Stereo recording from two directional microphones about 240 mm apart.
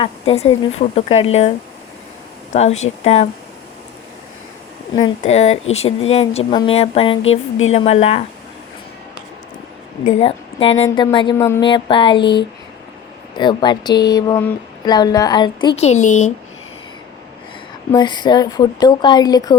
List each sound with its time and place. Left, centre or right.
0.0 s speech: left
4.9 s speech: left
7.2 s a sound: left
7.7 s speech: left
10.1 s speech: left
13.3 s speech: centre
17.9 s speech: centre